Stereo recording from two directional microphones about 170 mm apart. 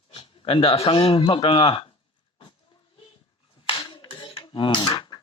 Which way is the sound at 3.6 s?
25° left (ahead or behind).